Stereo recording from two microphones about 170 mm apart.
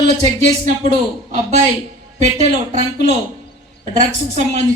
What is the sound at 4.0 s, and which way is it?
Speech, 45° right (ahead or behind).